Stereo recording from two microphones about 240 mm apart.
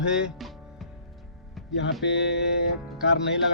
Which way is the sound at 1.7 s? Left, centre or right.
Left.